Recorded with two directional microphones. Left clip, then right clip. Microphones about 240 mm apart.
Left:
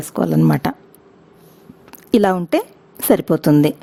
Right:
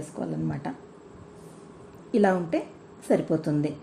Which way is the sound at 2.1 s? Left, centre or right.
Left.